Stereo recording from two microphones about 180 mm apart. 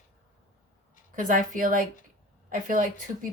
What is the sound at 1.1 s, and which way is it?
Speech, 50° right (ahead or behind).